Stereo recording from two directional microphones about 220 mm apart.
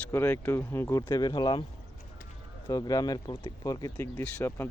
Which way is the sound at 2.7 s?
15° left (ahead or behind).